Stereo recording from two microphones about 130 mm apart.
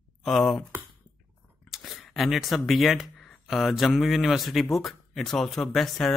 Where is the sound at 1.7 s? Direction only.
Centre (ahead or behind).